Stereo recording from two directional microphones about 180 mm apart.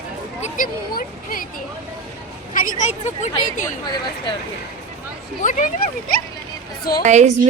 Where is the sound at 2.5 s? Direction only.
45° left (ahead or behind).